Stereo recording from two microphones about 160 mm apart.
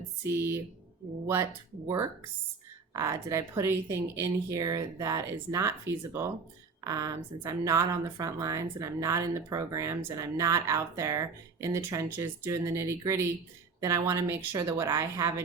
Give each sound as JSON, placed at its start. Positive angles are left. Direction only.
{"t": 0.3, "sound": "speech", "side_deg": -15}
{"t": 2.9, "sound": "a woman's voice", "side_deg": -20}